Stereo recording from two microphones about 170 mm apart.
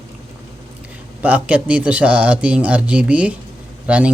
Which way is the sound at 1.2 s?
10° right (ahead or behind).